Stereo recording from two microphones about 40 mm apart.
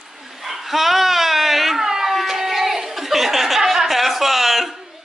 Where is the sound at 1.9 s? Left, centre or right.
Centre.